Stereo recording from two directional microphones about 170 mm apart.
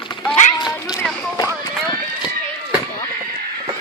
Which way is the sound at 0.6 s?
20° left (ahead or behind).